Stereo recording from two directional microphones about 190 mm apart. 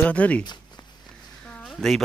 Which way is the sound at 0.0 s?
5° left (ahead or behind).